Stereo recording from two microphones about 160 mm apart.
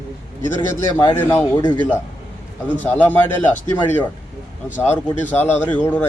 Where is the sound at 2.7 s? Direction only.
10° left (ahead or behind).